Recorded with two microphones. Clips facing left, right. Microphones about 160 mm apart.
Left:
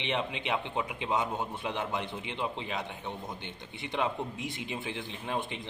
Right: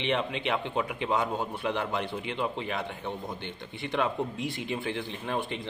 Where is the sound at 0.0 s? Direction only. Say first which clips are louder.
Right 4 dB; 15° left (ahead or behind).